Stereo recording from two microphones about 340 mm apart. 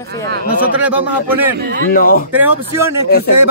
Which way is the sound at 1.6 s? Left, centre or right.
Right.